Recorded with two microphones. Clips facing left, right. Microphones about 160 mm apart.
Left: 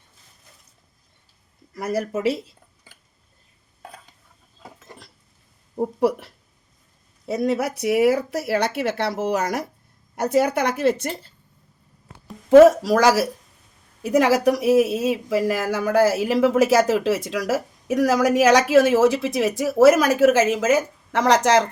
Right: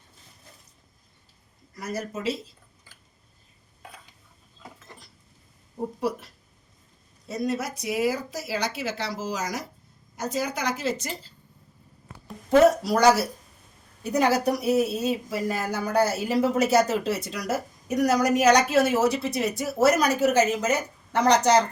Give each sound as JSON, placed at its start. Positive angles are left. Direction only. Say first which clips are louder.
{"t": 1.7, "sound": "speech", "louder": "left 8 dB", "side_deg": 65}
{"t": 5.7, "sound": "speech", "louder": "left 8 dB", "side_deg": 60}
{"t": 12.5, "sound": "speech", "louder": "left 7 dB", "side_deg": 90}